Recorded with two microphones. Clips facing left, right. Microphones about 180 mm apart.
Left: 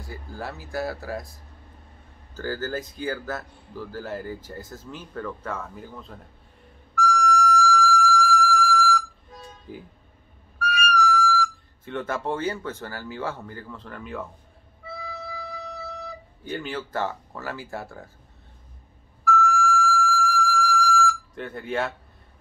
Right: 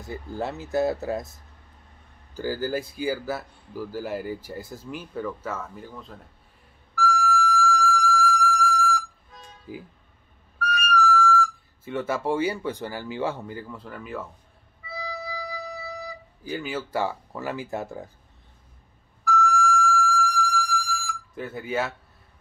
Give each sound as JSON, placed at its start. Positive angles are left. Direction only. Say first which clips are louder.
{"t": 0.0, "sound": "speech", "louder": "right 5 dB", "side_deg": -20}
{"t": 2.3, "sound": "speech", "louder": "right 2 dB", "side_deg": -10}
{"t": 7.0, "sound": "music", "louder": "left 2 dB", "side_deg": 0}
{"t": 9.7, "sound": "speech", "louder": "right 2 dB", "side_deg": -5}
{"t": 10.6, "sound": "music", "louder": "even", "side_deg": 0}
{"t": 11.2, "sound": "speech", "louder": "right 2 dB", "side_deg": -5}
{"t": 14.9, "sound": "music", "louder": "right 2 dB", "side_deg": 0}
{"t": 19.2, "sound": "music", "louder": "left 1 dB", "side_deg": 0}